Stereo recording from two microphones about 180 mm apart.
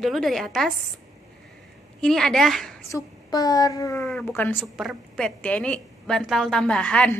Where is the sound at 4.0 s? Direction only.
5° left (ahead or behind).